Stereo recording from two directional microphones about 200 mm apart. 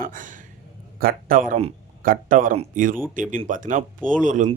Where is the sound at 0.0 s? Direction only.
40° right (ahead or behind).